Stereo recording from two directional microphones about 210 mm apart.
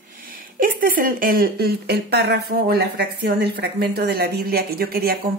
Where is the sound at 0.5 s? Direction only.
40° right (ahead or behind).